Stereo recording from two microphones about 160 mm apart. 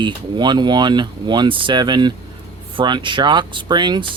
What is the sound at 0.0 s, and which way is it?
Speech, 30° right (ahead or behind).